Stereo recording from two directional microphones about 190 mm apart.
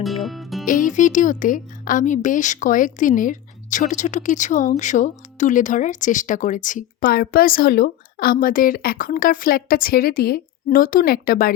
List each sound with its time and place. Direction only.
0.0 s music: centre (ahead or behind)
0.6 s speech: 45° left (ahead or behind)